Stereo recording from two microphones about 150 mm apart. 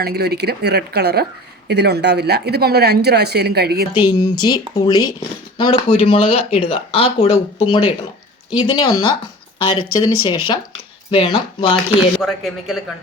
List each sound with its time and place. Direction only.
0.0 s speech: 90° right
3.9 s speech: 30° left (ahead or behind)
12.2 s a man's voice: centre (ahead or behind)